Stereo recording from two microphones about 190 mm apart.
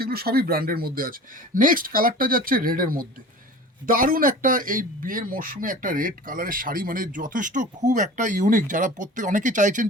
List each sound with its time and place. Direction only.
0.0 s a man's voice: 55° right (ahead or behind)